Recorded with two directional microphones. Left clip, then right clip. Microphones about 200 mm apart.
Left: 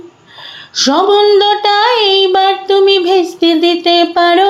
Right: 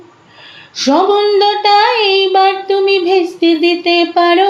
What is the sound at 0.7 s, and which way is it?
Child singing, 35° left (ahead or behind).